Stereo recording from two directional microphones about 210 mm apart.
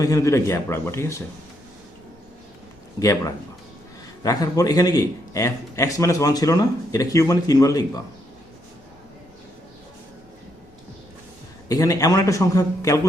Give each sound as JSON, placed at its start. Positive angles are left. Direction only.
{"t": 0.0, "sound": "a man's voice", "side_deg": 15}
{"t": 3.0, "sound": "a man's voice", "side_deg": 15}
{"t": 11.7, "sound": "a man's voice", "side_deg": 15}